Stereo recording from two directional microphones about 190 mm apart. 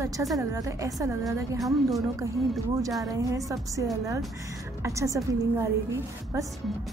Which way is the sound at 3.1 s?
15° right (ahead or behind).